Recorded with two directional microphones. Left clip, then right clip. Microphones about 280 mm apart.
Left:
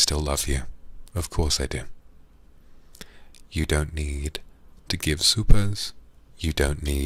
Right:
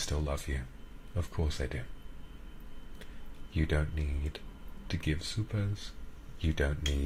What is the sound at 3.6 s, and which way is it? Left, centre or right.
Speech, left.